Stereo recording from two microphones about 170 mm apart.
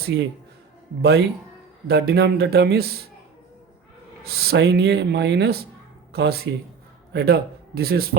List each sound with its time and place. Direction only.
0.0 s speech: 75° right (ahead or behind)
1.9 s speech: 65° right (ahead or behind)
4.2 s a man's voice: 65° right (ahead or behind)